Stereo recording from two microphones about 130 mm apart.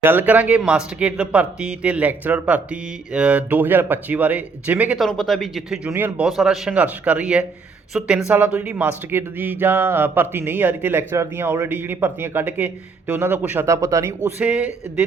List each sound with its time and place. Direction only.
0.0 s speech: 15° right (ahead or behind)
4.9 s speech: centre (ahead or behind)
5.9 s speech: 15° right (ahead or behind)
6.2 s speech: 5° right (ahead or behind); by 14.1 s 25° right (ahead or behind)
14.3 s speech: 10° right (ahead or behind)